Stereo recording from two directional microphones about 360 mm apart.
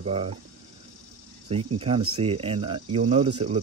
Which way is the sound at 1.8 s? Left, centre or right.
Centre.